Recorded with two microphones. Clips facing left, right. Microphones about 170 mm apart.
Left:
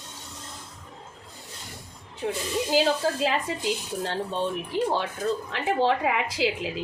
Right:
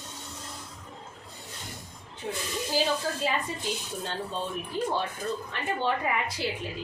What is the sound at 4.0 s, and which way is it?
A woman's voice, 80° left.